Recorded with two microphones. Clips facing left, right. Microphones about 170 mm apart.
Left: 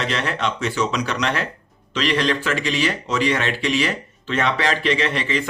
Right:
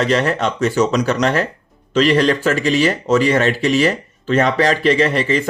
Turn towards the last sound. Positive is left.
turn(degrees=-40)  # may be behind; listen again after turning